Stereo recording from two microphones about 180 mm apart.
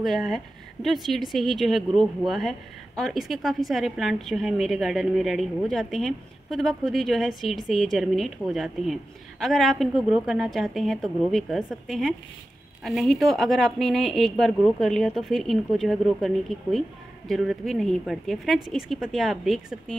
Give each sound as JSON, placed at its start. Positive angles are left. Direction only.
{"t": 0.0, "sound": "a woman's voice", "side_deg": 0}